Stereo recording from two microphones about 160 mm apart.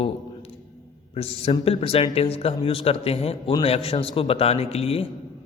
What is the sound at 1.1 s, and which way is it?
Speech, 40° left (ahead or behind).